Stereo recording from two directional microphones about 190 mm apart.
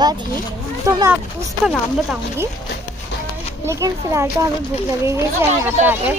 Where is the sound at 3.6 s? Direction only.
15° right (ahead or behind).